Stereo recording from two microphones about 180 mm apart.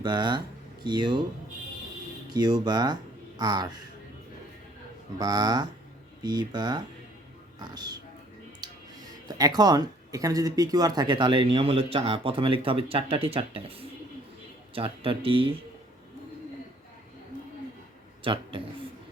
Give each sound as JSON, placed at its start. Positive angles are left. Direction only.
{"t": 0.0, "sound": "speech", "side_deg": -25}
{"t": 2.3, "sound": "speech", "side_deg": -20}
{"t": 5.1, "sound": "speech", "side_deg": -20}
{"t": 9.2, "sound": "speech", "side_deg": -20}
{"t": 18.2, "sound": "a man's voice", "side_deg": -30}